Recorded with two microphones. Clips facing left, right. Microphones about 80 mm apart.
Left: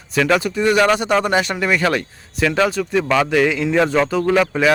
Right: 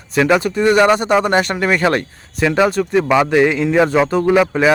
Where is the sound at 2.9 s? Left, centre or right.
Centre.